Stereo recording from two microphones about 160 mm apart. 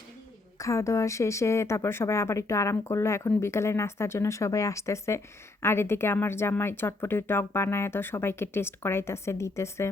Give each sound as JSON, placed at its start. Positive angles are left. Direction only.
{"t": 0.6, "sound": "speech", "side_deg": 20}